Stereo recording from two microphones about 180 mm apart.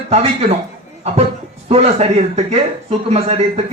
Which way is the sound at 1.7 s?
35° right (ahead or behind).